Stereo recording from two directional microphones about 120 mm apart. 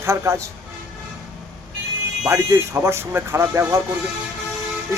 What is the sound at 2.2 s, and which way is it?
Speech, 25° right (ahead or behind).